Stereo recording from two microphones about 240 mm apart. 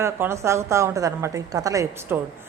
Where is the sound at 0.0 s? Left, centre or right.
Centre.